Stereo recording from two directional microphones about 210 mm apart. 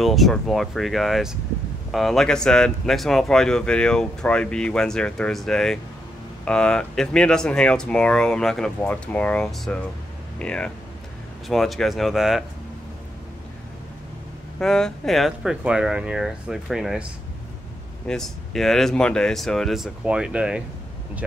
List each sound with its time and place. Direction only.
0.0 s speech: centre (ahead or behind)
14.6 s speech: centre (ahead or behind)
18.0 s speech: centre (ahead or behind)